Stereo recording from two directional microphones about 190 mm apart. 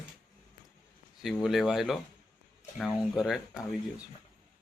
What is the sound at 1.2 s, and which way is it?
Speech, centre (ahead or behind).